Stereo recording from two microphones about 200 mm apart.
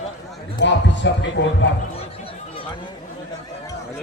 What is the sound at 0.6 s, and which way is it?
Speech, 60° left (ahead or behind).